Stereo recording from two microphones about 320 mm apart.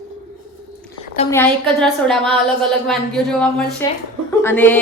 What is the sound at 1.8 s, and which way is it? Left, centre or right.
A woman's voice, centre.